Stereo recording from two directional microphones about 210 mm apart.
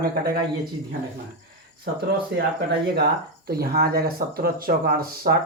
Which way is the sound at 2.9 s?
50° right (ahead or behind).